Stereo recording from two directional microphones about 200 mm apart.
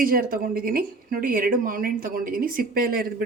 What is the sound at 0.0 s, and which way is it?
Speech, 45° right (ahead or behind).